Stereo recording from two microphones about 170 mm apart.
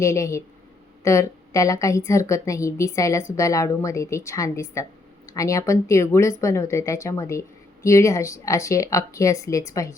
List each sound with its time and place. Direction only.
0.0 s speech: 15° left (ahead or behind)